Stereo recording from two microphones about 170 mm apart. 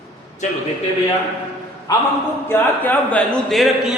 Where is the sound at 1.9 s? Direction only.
20° left (ahead or behind).